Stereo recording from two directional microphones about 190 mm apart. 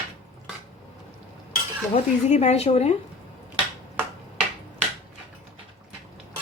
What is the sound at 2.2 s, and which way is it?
Speech, 35° left (ahead or behind).